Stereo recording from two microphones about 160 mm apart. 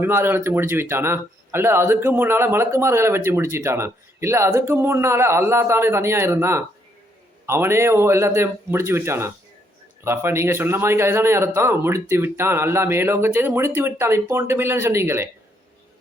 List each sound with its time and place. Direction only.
0.0 s speech: 15° right (ahead or behind)